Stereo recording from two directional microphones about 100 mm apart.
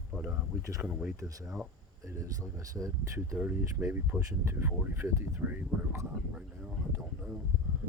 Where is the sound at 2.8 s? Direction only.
30° right (ahead or behind).